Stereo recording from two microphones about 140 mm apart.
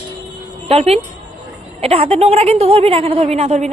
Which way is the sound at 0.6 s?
45° right (ahead or behind).